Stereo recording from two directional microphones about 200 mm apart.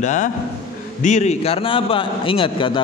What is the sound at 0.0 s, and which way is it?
A man's voice, 40° left (ahead or behind).